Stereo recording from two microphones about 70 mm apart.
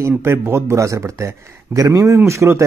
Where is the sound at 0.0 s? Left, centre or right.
Right.